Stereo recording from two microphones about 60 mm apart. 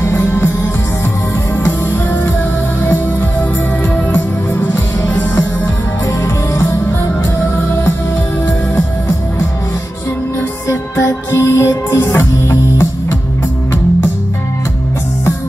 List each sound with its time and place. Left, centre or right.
0.2 s music: left
2.8 s music: left
6.2 s music: left
10.7 s music: left